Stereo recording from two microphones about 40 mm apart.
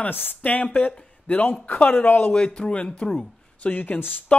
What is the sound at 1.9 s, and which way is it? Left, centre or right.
Speech, left.